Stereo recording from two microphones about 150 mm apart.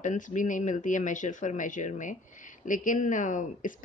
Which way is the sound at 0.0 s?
55° left (ahead or behind).